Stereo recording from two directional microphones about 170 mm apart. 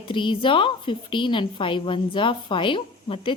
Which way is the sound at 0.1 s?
30° left (ahead or behind).